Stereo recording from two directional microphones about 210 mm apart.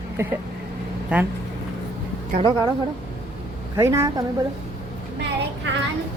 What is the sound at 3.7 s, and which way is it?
Speech, 15° right (ahead or behind).